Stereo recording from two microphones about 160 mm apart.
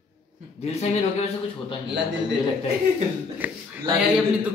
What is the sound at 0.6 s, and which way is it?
Speech, 40° left (ahead or behind).